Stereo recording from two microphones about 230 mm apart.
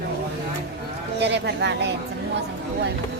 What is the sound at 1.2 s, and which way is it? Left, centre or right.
Speech, right.